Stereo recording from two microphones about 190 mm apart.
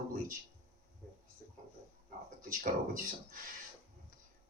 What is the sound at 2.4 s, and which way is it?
Speech, 45° right (ahead or behind).